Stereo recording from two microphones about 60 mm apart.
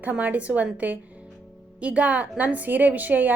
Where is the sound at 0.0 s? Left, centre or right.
Right.